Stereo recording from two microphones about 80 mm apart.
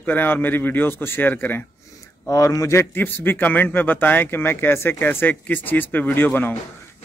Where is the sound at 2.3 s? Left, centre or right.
Left.